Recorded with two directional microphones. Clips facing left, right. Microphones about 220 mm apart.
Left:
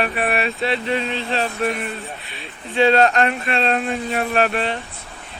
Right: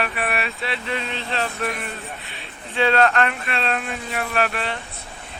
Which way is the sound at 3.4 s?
30° left (ahead or behind).